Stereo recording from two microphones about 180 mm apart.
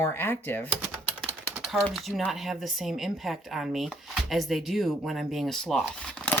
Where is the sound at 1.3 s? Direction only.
5° right (ahead or behind).